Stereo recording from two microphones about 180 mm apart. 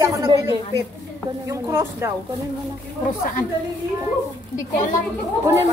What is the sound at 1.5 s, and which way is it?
Speech, 15° right (ahead or behind).